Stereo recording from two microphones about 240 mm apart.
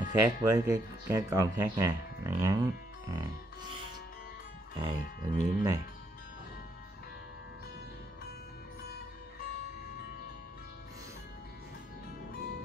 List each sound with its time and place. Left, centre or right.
0.0 s speech: centre
4.7 s speech: centre